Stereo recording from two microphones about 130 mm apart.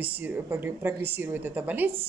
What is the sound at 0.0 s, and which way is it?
A woman's voice, 20° right (ahead or behind).